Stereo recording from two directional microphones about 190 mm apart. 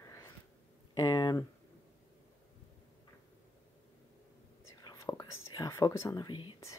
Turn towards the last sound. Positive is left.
turn(degrees=25)  # may be behind; listen again after turning